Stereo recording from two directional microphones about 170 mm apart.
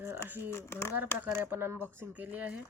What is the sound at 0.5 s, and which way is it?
Speech, 15° left (ahead or behind).